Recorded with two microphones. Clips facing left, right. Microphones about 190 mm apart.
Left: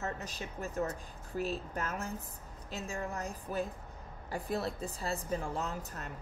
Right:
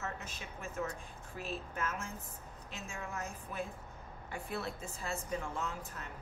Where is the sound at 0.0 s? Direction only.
35° left (ahead or behind).